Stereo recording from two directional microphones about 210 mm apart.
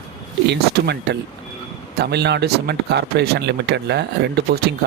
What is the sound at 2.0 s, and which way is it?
Speech, 50° right (ahead or behind).